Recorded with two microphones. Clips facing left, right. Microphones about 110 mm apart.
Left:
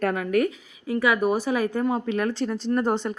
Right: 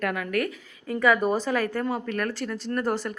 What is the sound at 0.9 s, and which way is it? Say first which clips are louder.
A woman's voice: even; 10° left (ahead or behind).